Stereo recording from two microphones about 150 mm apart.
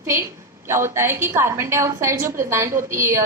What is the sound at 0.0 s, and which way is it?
A woman's voice, 20° right (ahead or behind).